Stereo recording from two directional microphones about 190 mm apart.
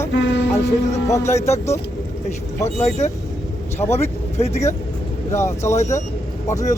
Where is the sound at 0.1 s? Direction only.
70° left (ahead or behind).